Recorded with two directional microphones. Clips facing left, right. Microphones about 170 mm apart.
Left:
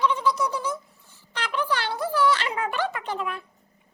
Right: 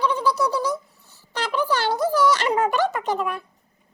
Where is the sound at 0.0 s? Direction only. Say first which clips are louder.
Right 2 dB; 35° right (ahead or behind).